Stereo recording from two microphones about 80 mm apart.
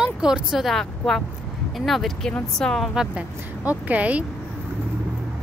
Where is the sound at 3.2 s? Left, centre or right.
Centre.